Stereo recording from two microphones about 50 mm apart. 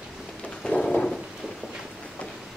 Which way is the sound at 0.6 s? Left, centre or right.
Centre.